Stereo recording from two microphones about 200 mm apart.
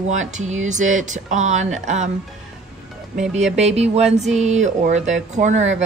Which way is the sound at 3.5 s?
35° right (ahead or behind).